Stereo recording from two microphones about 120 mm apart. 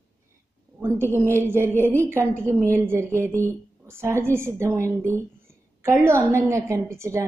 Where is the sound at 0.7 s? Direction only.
20° right (ahead or behind).